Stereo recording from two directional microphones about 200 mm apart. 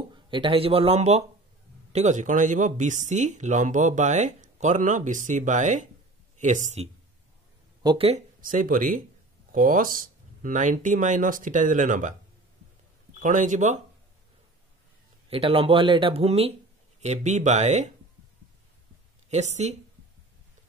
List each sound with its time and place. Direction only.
0.1 s speech: 25° right (ahead or behind)
7.8 s speech: 25° right (ahead or behind)
8.4 s speech: 45° right (ahead or behind)
13.2 s speech: 40° right (ahead or behind)
15.2 s speech: 30° right (ahead or behind)
19.3 s speech: 35° right (ahead or behind)